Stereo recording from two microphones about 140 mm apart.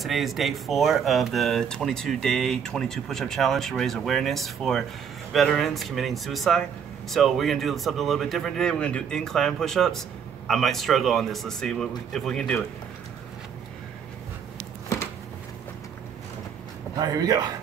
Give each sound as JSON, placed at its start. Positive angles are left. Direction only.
{"t": 0.0, "sound": "speech", "side_deg": 0}
{"t": 17.0, "sound": "speech", "side_deg": -25}